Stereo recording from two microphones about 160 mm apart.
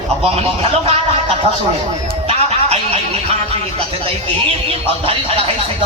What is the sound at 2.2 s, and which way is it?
Music, 40° right (ahead or behind).